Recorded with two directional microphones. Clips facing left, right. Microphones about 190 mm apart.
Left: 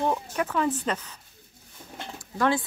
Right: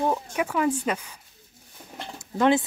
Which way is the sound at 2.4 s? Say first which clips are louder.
Right 4 dB; 20° right (ahead or behind).